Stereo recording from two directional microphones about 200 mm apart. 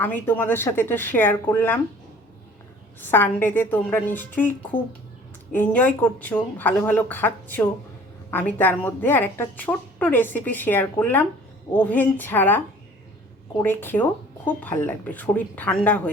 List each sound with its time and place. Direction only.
0.0 s a woman's voice: 10° left (ahead or behind)
3.0 s a woman's voice: 10° left (ahead or behind)